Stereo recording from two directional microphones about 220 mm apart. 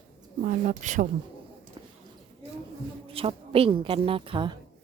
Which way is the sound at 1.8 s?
20° right (ahead or behind).